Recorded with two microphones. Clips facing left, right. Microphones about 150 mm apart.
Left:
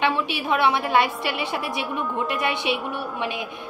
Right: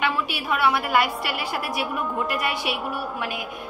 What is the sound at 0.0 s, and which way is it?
A woman's voice, 25° left (ahead or behind).